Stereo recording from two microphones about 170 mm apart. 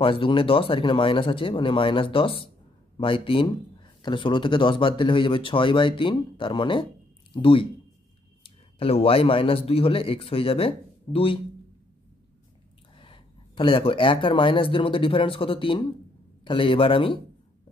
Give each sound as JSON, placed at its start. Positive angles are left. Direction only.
{"t": 0.0, "sound": "speech", "side_deg": 30}
{"t": 12.9, "sound": "speech", "side_deg": 30}